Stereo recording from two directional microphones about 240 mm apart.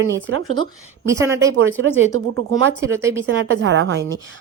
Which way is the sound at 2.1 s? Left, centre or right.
Right.